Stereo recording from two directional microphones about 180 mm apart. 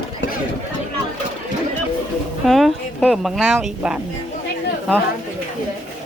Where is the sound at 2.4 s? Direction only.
Centre (ahead or behind).